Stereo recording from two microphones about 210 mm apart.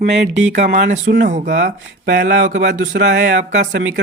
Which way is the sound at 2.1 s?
60° right (ahead or behind).